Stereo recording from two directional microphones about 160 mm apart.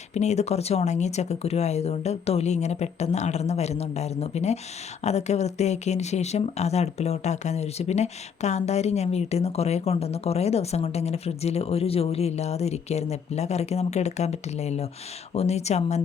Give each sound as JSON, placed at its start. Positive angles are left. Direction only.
{"t": 0.1, "sound": "speech", "side_deg": 45}